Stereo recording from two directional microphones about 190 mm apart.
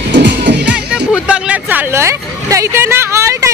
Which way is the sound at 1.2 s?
5° right (ahead or behind).